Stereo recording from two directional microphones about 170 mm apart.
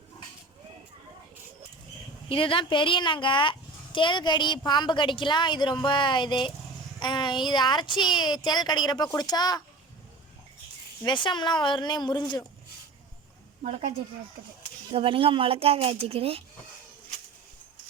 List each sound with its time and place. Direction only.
2.3 s speech: 30° left (ahead or behind)
11.0 s speech: 30° left (ahead or behind)
14.9 s speech: 30° right (ahead or behind)